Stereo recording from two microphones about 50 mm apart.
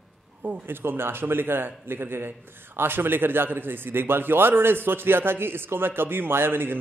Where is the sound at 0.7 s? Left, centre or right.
Right.